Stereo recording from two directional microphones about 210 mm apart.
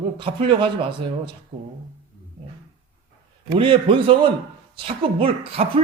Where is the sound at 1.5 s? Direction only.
35° right (ahead or behind).